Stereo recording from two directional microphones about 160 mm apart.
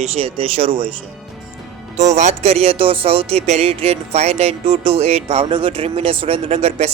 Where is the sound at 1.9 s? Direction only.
45° right (ahead or behind).